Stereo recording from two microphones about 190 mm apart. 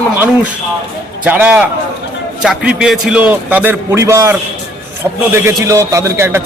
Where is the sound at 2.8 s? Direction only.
5° right (ahead or behind).